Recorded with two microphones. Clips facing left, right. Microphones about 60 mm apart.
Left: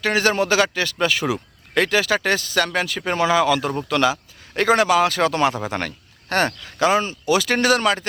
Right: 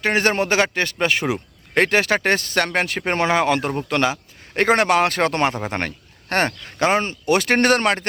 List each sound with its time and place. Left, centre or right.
0.0 s speech: right
3.8 s speech: right